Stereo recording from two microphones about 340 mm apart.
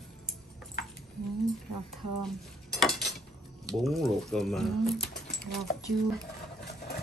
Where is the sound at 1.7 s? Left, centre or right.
Right.